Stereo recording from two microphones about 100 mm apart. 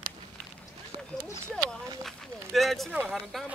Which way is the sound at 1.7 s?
Centre (ahead or behind).